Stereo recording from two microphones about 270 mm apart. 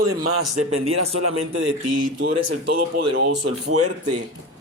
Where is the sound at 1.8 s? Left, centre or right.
Right.